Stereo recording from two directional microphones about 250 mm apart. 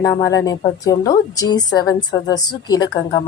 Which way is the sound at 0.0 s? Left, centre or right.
Centre.